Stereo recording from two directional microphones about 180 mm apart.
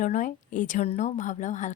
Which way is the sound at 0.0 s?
45° left (ahead or behind).